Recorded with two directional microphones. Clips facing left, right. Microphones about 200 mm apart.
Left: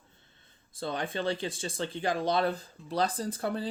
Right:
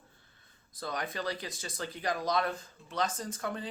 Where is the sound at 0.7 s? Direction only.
30° left (ahead or behind).